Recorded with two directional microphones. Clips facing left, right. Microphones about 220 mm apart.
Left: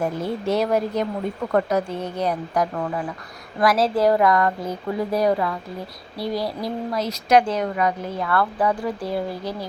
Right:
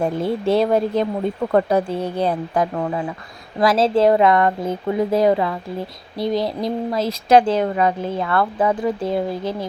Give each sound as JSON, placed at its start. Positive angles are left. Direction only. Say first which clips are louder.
{"t": 0.0, "sound": "a woman's voice", "louder": "right 4 dB", "side_deg": -30}